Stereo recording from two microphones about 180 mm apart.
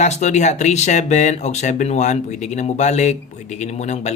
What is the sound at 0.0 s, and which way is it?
Speech, 40° left (ahead or behind).